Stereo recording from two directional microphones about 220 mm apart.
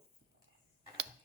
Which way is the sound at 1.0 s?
50° right (ahead or behind).